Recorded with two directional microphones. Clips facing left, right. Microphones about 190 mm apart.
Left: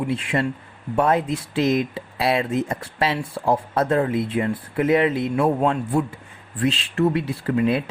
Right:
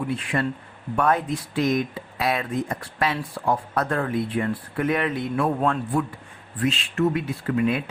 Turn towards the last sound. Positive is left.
turn(degrees=35)  # may be behind; listen again after turning